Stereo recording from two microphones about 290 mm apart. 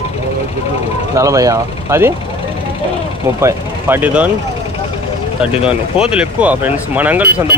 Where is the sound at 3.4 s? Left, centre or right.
Centre.